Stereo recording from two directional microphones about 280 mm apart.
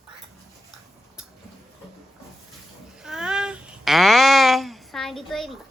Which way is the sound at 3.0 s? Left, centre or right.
Centre.